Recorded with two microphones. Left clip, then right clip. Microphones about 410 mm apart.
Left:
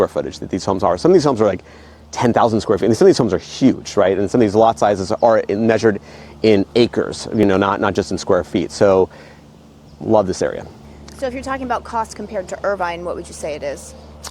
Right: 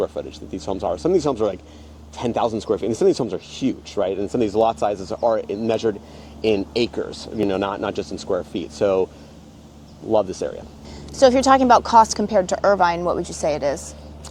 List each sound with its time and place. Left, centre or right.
0.0 s speech: left
7.0 s speech: left
10.1 s speech: left
11.2 s speech: right
12.6 s a woman's voice: centre